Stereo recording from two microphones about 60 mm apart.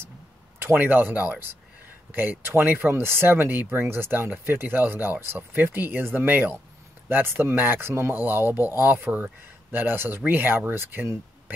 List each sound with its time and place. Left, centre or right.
0.6 s speech: right
8.1 s speech: right